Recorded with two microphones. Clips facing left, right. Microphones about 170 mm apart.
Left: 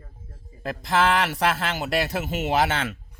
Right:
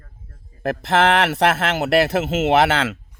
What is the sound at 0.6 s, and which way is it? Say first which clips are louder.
A man's voice: right 5 dB; 65° right (ahead or behind).